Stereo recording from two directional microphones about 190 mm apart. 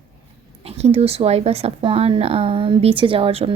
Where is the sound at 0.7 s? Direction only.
35° right (ahead or behind).